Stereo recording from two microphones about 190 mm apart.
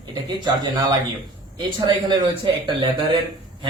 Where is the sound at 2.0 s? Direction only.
25° right (ahead or behind).